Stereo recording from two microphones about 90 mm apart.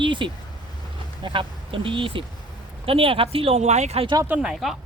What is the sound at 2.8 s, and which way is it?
Speech, 90° right.